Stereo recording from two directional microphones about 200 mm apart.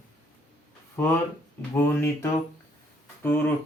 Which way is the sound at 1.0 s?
10° left (ahead or behind).